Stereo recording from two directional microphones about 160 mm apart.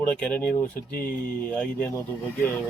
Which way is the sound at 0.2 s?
5° left (ahead or behind).